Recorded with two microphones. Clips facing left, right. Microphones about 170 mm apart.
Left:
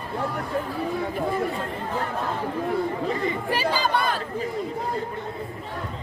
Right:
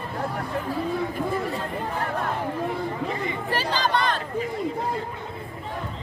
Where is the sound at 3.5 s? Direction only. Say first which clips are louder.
Right 1 dB; 10° left (ahead or behind).